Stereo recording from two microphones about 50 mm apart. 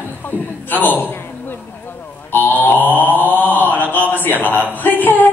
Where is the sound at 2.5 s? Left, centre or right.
Left.